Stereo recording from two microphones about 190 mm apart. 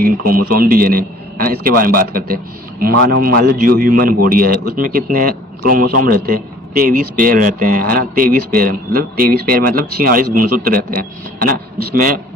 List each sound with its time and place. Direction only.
0.0 s a man's voice: 50° right (ahead or behind)